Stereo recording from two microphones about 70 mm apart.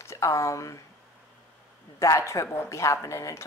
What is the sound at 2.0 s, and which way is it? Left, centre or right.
Speech, left.